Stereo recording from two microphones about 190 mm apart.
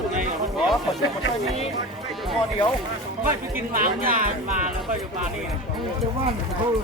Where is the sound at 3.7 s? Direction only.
45° right (ahead or behind).